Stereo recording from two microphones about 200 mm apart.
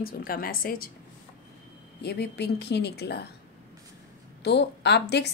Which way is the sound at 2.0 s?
55° left (ahead or behind).